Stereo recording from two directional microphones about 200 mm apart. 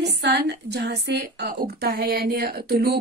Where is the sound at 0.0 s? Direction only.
60° right (ahead or behind).